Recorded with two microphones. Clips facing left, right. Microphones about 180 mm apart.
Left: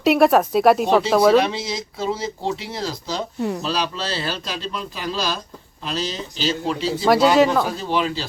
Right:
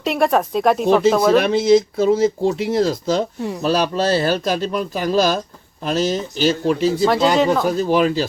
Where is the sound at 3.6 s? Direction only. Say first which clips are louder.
Right 7 dB; 50° right (ahead or behind).